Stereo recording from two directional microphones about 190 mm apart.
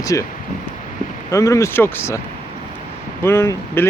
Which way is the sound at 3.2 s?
15° left (ahead or behind).